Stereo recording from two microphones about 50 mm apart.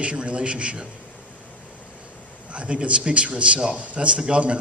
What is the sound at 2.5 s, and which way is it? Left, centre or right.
A man's voice, right.